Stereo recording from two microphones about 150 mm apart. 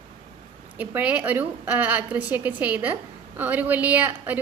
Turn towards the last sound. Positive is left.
turn(degrees=-10)  # may be behind; listen again after turning